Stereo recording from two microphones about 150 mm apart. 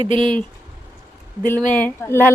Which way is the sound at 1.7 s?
10° left (ahead or behind).